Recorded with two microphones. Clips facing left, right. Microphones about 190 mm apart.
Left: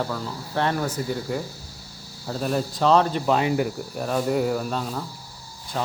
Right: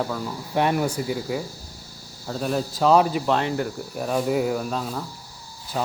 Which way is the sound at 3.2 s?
5° left (ahead or behind).